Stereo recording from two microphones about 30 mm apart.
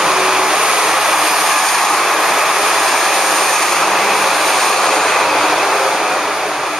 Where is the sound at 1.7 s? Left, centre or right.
Centre.